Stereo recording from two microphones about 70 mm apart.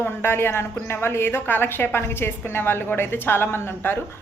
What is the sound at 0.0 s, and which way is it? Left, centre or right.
A woman's voice, left.